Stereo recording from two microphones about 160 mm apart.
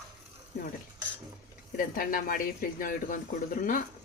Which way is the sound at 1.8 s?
60° left (ahead or behind).